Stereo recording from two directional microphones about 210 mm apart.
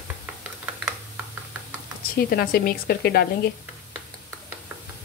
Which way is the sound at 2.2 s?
45° left (ahead or behind).